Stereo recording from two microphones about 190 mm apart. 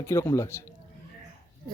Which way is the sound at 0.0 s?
15° left (ahead or behind).